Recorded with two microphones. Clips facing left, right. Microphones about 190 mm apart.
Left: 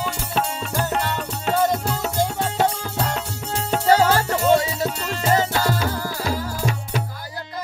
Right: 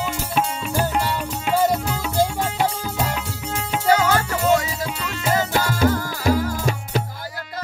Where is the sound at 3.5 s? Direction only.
35° left (ahead or behind).